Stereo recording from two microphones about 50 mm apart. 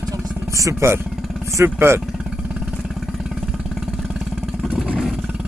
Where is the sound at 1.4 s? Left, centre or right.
Right.